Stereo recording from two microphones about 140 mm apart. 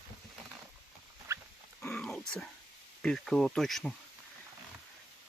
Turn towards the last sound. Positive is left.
turn(degrees=0)  # may be behind; listen again after turning